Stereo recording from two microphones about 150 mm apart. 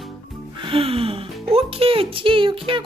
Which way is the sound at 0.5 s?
35° right (ahead or behind).